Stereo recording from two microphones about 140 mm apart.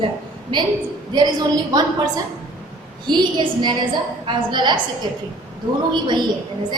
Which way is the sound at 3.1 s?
30° right (ahead or behind).